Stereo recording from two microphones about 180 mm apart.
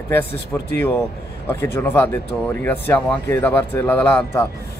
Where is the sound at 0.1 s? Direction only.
10° left (ahead or behind).